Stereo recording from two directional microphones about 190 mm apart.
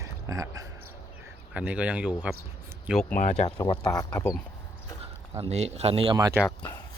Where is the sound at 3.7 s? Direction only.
20° left (ahead or behind).